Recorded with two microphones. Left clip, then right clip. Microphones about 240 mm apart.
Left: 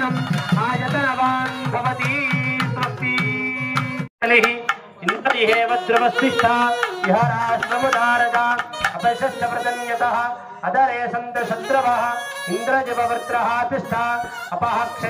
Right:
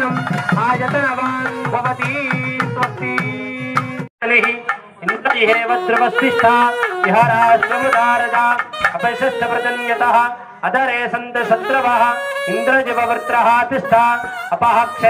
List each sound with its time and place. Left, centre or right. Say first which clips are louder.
0.6 s music: right 4 dB; right
5.2 s speech: right 3 dB; right
9.0 s music: right 3 dB; right